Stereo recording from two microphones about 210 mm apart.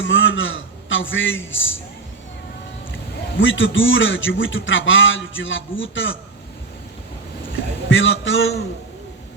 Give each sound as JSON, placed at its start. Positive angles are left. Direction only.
{"t": 0.0, "sound": "a man's voice", "side_deg": 65}
{"t": 3.4, "sound": "a man's voice", "side_deg": 65}
{"t": 7.9, "sound": "a man's voice", "side_deg": 65}